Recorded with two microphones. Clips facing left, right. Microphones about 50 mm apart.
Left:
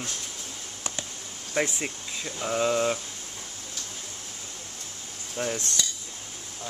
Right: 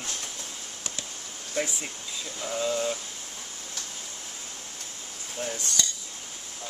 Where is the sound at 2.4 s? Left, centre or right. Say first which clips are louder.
Left 4 dB; left.